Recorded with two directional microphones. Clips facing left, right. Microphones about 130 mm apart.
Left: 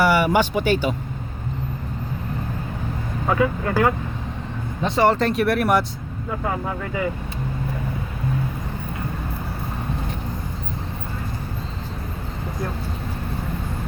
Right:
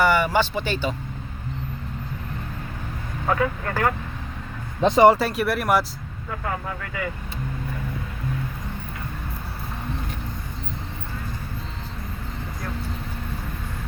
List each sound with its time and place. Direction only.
0.0 s a sound: 10° left (ahead or behind)
0.3 s speech: 15° left (ahead or behind)
3.2 s speech: 5° left (ahead or behind)
4.8 s speech: 20° right (ahead or behind); by 5.8 s centre (ahead or behind)